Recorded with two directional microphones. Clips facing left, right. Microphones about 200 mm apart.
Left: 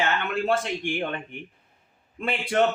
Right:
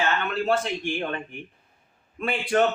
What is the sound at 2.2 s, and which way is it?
Speech, 25° left (ahead or behind).